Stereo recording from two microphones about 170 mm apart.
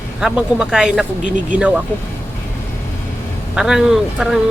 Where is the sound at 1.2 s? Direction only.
50° right (ahead or behind).